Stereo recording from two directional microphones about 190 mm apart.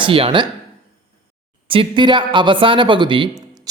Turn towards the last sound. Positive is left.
turn(degrees=-25)  # may be behind; listen again after turning